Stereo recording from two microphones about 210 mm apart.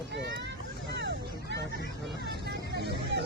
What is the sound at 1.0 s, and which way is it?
Hubbub, 55° right (ahead or behind).